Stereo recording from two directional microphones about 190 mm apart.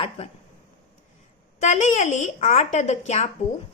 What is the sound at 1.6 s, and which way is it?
A woman's voice, 40° left (ahead or behind).